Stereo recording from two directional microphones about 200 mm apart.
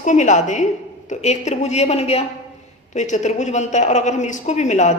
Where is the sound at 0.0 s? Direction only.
35° left (ahead or behind).